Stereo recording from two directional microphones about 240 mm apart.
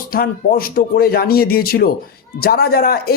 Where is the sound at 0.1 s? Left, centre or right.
Left.